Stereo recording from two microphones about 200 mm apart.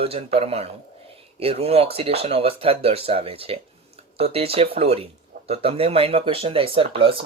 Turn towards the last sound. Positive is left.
turn(degrees=-25)  # may be behind; listen again after turning